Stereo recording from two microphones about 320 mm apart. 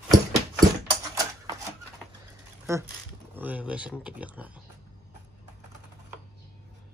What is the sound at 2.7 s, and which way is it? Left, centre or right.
Speech, centre.